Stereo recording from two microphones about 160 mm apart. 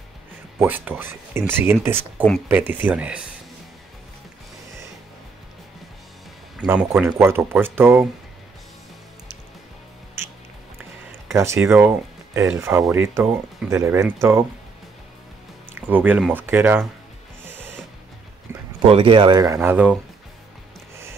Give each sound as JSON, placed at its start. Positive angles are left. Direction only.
{"t": 0.6, "sound": "speech", "side_deg": -10}
{"t": 6.6, "sound": "speech", "side_deg": -10}
{"t": 11.3, "sound": "speech", "side_deg": -15}
{"t": 15.7, "sound": "speech", "side_deg": -10}
{"t": 18.5, "sound": "a sound", "side_deg": -15}
{"t": 18.9, "sound": "speech", "side_deg": -35}